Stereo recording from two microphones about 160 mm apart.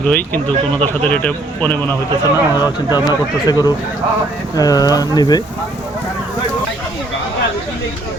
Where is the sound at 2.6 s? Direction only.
25° left (ahead or behind).